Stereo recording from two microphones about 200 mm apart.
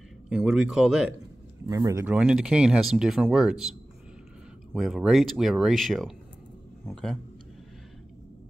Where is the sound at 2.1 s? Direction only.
5° right (ahead or behind).